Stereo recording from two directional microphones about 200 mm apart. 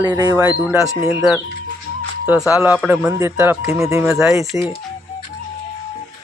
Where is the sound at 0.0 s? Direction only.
20° right (ahead or behind).